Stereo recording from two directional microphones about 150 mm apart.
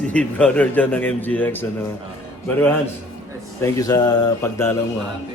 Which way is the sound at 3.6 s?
25° left (ahead or behind).